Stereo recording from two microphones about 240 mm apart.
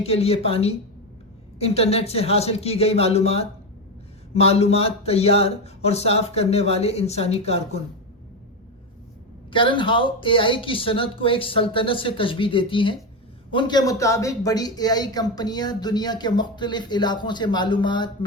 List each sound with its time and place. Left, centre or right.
0.0 s speech: left
9.5 s a man's voice: left